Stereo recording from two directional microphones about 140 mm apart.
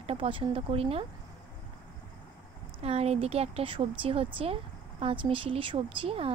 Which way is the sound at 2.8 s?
45° right (ahead or behind).